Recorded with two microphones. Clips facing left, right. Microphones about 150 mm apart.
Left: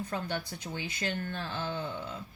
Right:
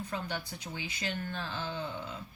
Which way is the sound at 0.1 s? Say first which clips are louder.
Left 2 dB; 55° left (ahead or behind).